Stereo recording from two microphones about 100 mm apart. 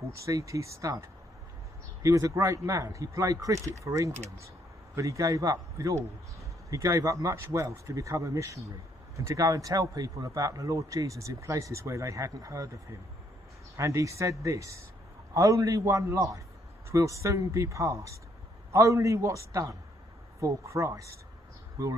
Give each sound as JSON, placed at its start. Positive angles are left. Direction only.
{"t": 0.2, "sound": "a man's voice", "side_deg": -30}
{"t": 13.7, "sound": "a man's voice", "side_deg": -30}